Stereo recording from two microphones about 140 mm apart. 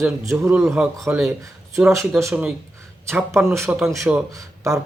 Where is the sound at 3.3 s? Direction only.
20° right (ahead or behind).